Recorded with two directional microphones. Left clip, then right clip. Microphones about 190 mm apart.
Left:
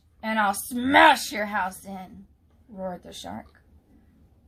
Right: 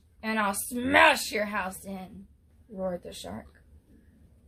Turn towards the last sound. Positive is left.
turn(degrees=-20)  # may be behind; listen again after turning